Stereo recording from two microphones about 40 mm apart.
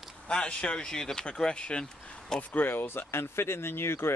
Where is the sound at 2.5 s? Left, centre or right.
Left.